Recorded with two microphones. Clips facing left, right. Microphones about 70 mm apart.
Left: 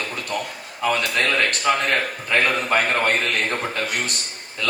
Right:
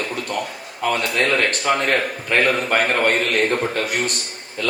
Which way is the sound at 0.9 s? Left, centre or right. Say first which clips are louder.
Right 2 dB; right.